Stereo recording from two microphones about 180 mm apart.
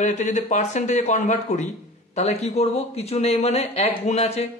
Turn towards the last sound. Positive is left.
turn(degrees=35)  # may be behind; listen again after turning